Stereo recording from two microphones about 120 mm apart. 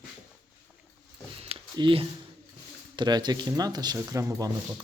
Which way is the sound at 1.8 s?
45° right (ahead or behind).